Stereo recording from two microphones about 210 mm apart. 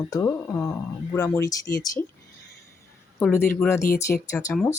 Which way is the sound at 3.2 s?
10° left (ahead or behind).